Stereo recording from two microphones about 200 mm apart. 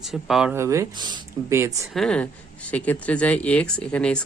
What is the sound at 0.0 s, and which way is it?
Speech, centre (ahead or behind).